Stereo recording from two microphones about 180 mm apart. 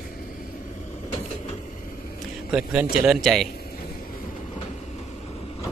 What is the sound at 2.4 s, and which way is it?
A man's voice, 5° right (ahead or behind).